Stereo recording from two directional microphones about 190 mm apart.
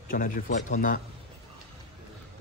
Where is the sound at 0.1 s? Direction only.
50° left (ahead or behind).